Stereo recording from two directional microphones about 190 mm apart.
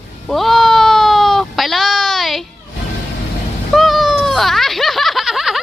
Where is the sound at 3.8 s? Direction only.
Centre (ahead or behind).